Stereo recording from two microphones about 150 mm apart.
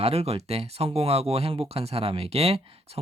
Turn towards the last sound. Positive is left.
turn(degrees=-40)  # may be behind; listen again after turning